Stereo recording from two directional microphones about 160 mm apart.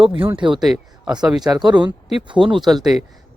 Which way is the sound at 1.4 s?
25° right (ahead or behind).